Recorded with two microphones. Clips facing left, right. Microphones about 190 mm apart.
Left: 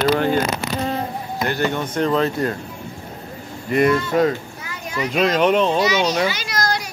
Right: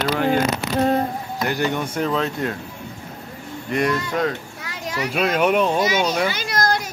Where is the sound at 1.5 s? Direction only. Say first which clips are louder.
Left 1 dB; 15° right (ahead or behind).